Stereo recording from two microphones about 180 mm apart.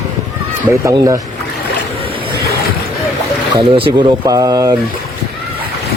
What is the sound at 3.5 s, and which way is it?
Speech, 25° right (ahead or behind).